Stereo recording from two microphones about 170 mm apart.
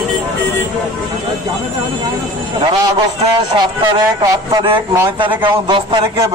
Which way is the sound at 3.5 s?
30° right (ahead or behind).